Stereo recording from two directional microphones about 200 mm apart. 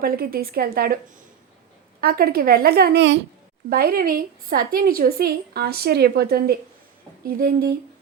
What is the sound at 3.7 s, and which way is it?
A woman's voice, 50° right (ahead or behind).